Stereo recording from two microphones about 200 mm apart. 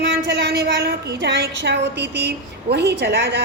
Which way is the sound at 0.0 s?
60° right (ahead or behind).